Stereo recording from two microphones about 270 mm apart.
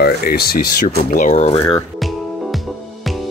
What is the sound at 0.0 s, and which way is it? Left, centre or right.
Speech, left.